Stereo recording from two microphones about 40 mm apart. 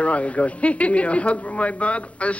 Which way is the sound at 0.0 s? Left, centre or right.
Left.